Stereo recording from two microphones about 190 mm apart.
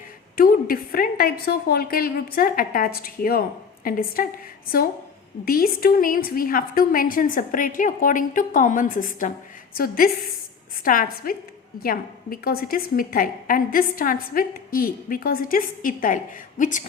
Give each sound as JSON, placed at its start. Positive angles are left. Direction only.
{"t": 0.3, "sound": "a woman's voice", "side_deg": 50}